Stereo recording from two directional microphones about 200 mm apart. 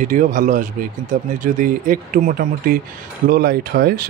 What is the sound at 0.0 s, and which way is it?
Speech, 40° right (ahead or behind).